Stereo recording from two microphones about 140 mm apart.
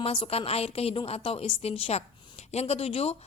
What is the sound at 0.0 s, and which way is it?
A woman's voice, 45° left (ahead or behind).